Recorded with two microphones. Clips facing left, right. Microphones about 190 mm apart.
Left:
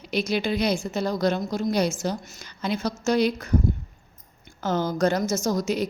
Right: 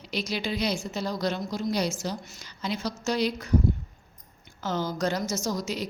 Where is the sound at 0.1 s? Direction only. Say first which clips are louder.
Left 6 dB; 55° left (ahead or behind).